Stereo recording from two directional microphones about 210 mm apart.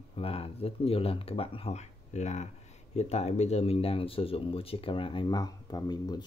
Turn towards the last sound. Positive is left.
turn(degrees=20)  # may be behind; listen again after turning